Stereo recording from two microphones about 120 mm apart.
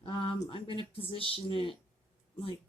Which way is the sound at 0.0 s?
45° left (ahead or behind).